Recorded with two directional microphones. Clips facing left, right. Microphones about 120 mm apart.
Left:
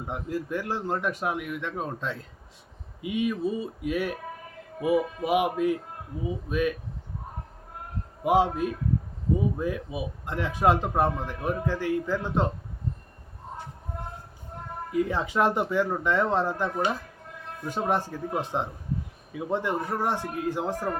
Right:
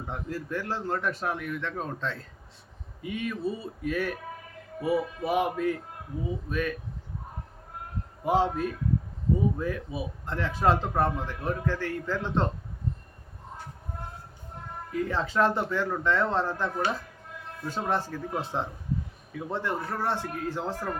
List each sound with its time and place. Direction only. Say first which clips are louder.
0.1 s a man's voice: left 3 dB; 15° left (ahead or behind)
8.2 s a man's voice: left 2 dB; 15° left (ahead or behind)
14.9 s a man's voice: left 2 dB; 15° left (ahead or behind)